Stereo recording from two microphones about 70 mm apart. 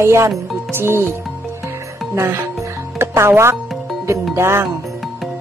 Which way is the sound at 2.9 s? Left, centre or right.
Right.